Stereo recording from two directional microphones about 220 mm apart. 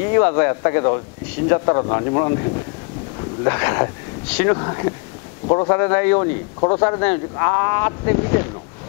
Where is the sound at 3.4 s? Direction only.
20° left (ahead or behind).